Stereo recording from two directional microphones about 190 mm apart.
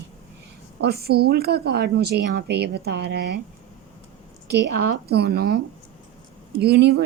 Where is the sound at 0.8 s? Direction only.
55° right (ahead or behind).